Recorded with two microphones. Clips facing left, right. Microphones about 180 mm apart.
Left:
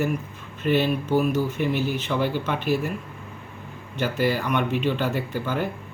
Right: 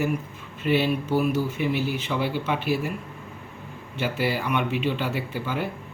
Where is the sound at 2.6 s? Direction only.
45° left (ahead or behind).